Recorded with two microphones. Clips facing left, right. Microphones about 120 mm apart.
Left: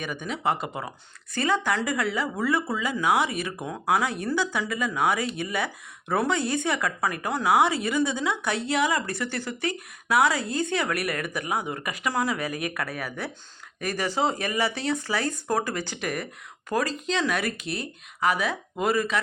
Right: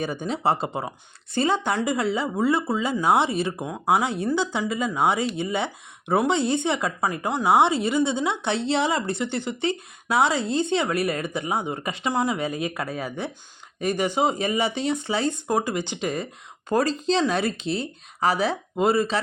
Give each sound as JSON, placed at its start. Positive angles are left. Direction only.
{"t": 0.0, "sound": "speech", "side_deg": -30}